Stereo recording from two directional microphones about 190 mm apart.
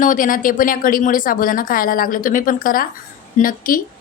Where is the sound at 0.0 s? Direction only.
45° left (ahead or behind).